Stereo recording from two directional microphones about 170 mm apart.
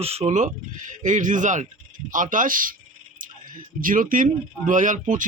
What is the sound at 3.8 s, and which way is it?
A man's voice, 55° right (ahead or behind).